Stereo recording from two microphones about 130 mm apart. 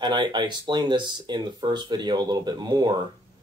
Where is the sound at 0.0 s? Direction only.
35° right (ahead or behind).